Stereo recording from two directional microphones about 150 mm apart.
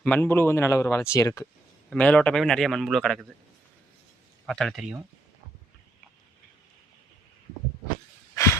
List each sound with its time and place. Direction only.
0.0 s speech: 10° left (ahead or behind)
1.9 s a man's voice: 5° left (ahead or behind)
4.4 s a man's voice: centre (ahead or behind)